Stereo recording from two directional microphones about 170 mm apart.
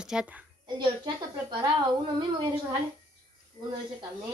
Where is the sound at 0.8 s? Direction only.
25° right (ahead or behind).